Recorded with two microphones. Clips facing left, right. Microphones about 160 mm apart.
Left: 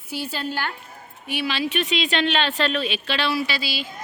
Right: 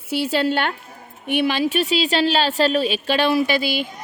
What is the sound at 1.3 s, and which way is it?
A woman's voice, 55° right (ahead or behind).